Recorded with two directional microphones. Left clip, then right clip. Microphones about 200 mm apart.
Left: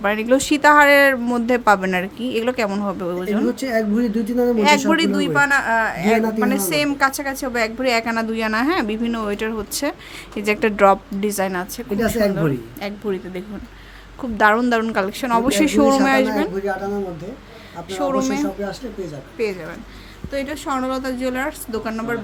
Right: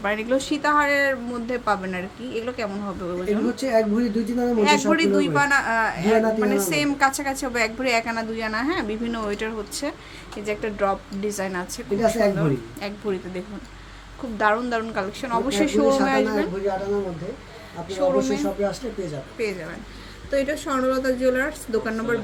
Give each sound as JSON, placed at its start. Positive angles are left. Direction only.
{"t": 0.0, "sound": "speech", "side_deg": 20}
{"t": 4.5, "sound": "speech", "side_deg": 25}
{"t": 10.4, "sound": "speech", "side_deg": 35}
{"t": 11.9, "sound": "speech", "side_deg": 50}
{"t": 12.4, "sound": "a woman's voice", "side_deg": 15}
{"t": 14.3, "sound": "speech", "side_deg": 30}
{"t": 17.8, "sound": "speech", "side_deg": 25}
{"t": 19.4, "sound": "a woman's voice", "side_deg": 15}